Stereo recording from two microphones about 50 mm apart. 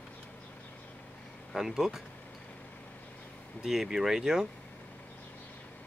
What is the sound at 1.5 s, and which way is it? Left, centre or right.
Speech, centre.